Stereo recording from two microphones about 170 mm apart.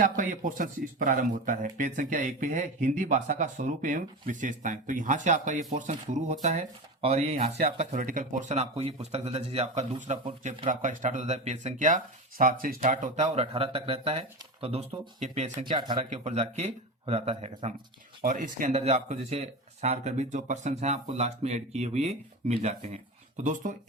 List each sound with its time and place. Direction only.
0.0 s speech: 50° right (ahead or behind); by 10.3 s 35° right (ahead or behind)
10.4 s speech: 50° right (ahead or behind)
15.6 s speech: 30° right (ahead or behind)
16.0 s speech: 40° right (ahead or behind)
18.2 s speech: 50° right (ahead or behind)